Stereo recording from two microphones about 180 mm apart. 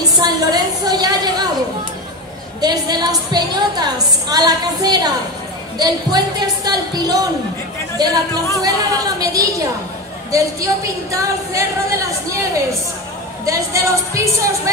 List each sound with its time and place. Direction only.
0.2 s a sound: 20° right (ahead or behind)
2.6 s a woman's voice: 20° right (ahead or behind)
13.5 s a woman's voice: 20° right (ahead or behind)